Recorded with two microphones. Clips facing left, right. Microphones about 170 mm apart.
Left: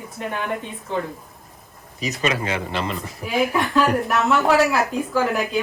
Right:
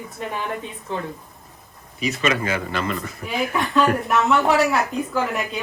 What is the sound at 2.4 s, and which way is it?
Speech, 25° left (ahead or behind).